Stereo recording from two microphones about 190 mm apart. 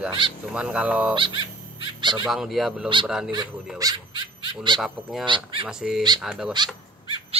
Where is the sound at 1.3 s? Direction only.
75° left (ahead or behind).